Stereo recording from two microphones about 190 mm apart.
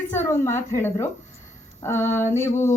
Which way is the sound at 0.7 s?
15° left (ahead or behind).